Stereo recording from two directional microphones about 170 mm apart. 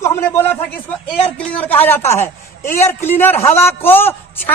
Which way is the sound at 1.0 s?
35° left (ahead or behind).